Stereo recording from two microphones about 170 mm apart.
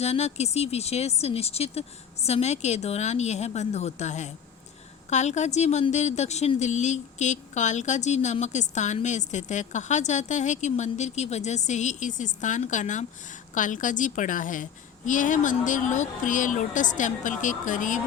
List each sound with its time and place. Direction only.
0.0 s a woman's voice: 40° left (ahead or behind)